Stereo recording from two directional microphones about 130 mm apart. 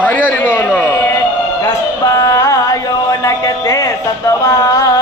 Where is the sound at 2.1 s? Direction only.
25° left (ahead or behind).